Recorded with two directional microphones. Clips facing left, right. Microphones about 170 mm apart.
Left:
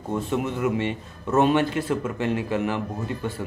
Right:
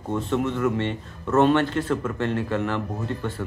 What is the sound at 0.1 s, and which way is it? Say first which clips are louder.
A man's voice: right 1 dB; 10° left (ahead or behind).